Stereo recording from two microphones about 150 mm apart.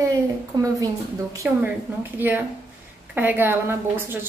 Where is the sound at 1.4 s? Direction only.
10° right (ahead or behind).